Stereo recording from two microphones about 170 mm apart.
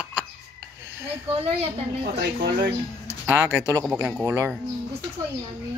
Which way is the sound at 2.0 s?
70° right (ahead or behind).